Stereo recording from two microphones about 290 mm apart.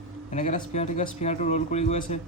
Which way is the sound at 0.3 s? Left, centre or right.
Left.